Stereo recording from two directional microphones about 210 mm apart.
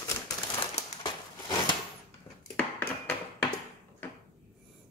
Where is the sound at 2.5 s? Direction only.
5° left (ahead or behind).